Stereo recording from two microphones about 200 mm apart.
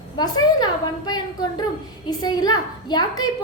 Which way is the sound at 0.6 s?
20° left (ahead or behind).